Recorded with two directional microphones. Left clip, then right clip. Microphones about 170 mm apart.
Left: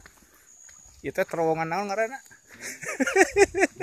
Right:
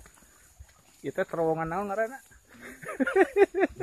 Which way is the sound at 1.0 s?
15° left (ahead or behind).